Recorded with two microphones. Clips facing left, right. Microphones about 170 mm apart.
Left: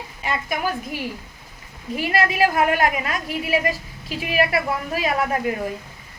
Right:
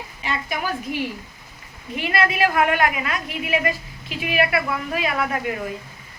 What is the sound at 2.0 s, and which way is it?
A woman's voice, 40° left (ahead or behind).